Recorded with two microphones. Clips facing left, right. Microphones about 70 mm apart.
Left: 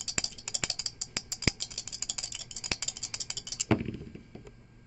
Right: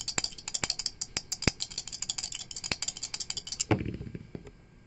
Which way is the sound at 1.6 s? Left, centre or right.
Centre.